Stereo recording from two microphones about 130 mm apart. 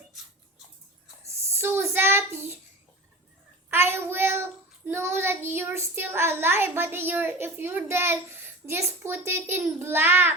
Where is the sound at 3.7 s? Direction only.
20° right (ahead or behind).